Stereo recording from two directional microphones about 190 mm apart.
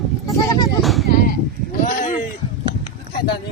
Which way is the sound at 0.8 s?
Centre (ahead or behind).